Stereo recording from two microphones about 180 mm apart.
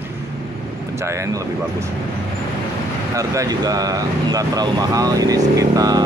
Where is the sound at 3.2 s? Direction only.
20° right (ahead or behind).